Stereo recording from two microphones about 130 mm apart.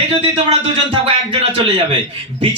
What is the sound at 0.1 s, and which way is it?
A man's voice, 45° right (ahead or behind).